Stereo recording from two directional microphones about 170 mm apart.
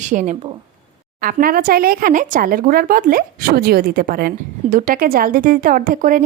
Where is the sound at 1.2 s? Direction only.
60° right (ahead or behind).